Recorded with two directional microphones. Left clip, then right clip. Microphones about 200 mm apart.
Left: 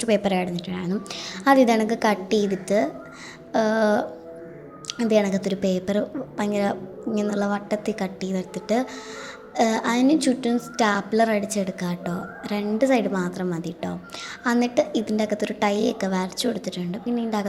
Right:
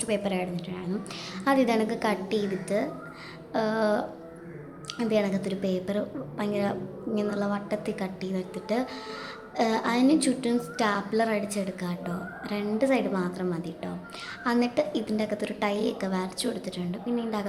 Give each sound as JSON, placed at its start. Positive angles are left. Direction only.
{"t": 0.0, "sound": "a woman's voice", "side_deg": 25}